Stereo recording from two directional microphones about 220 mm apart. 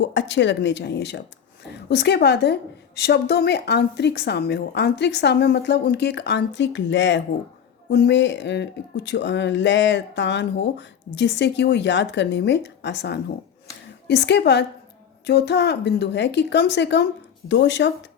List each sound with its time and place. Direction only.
0.0 s a woman's voice: 55° left (ahead or behind)